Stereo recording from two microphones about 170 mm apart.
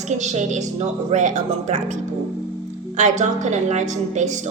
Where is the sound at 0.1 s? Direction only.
45° right (ahead or behind).